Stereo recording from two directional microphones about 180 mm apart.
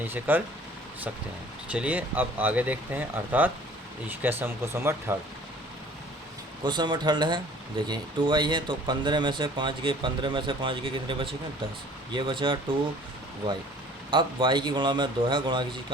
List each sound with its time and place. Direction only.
0.1 s speech: 10° right (ahead or behind)
1.6 s speech: 5° right (ahead or behind)
6.7 s speech: 25° right (ahead or behind)
14.1 s speech: 25° right (ahead or behind)